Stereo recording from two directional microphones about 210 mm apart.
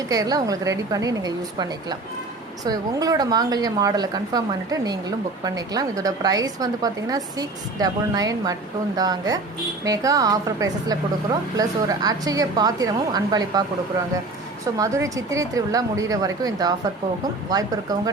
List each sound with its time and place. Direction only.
0.1 s a woman's voice: 15° right (ahead or behind)
14.8 s a woman's voice: 15° right (ahead or behind)